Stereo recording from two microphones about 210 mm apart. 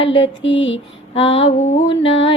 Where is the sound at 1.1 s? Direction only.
25° left (ahead or behind).